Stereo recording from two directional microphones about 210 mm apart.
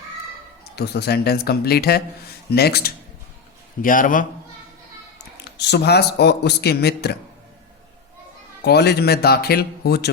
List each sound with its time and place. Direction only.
0.6 s a man's voice: 50° left (ahead or behind)
5.4 s speech: 55° left (ahead or behind)
8.6 s speech: 50° left (ahead or behind)